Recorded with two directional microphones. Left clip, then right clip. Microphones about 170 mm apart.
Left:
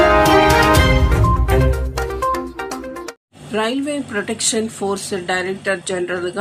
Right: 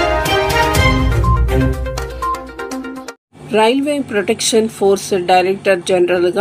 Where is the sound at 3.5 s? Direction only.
15° right (ahead or behind).